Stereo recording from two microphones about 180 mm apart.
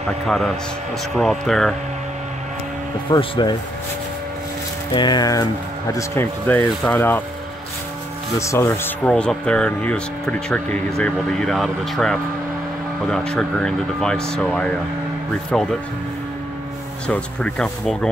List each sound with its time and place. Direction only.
0.3 s speech: centre (ahead or behind)
3.1 s speech: 25° left (ahead or behind)
4.9 s speech: 25° left (ahead or behind)
8.4 s speech: 15° left (ahead or behind)
17.1 s speech: 5° left (ahead or behind)